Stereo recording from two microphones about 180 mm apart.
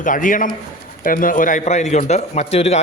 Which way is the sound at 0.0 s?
50° left (ahead or behind).